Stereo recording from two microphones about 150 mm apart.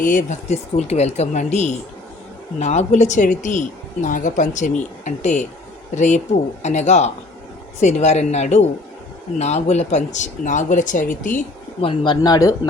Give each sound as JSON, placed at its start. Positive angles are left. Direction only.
{"t": 0.0, "sound": "speech", "side_deg": 65}
{"t": 11.8, "sound": "speech", "side_deg": 35}